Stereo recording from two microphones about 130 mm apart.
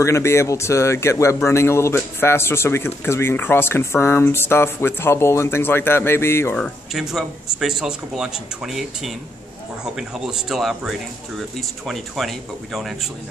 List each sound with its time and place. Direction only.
0.0 s a man's voice: 20° left (ahead or behind)
6.5 s speech: centre (ahead or behind)